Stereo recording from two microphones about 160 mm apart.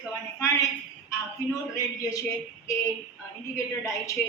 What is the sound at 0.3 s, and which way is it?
Speech, 20° left (ahead or behind).